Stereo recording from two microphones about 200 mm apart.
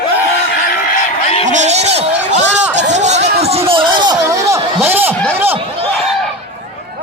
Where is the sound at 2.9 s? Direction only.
35° right (ahead or behind).